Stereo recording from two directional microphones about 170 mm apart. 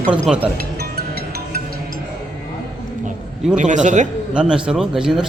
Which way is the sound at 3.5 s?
45° right (ahead or behind).